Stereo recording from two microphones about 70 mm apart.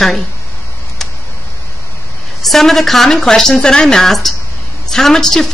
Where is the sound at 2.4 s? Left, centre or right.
Centre.